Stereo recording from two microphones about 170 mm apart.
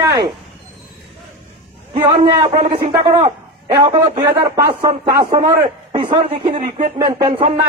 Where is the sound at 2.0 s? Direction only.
25° right (ahead or behind).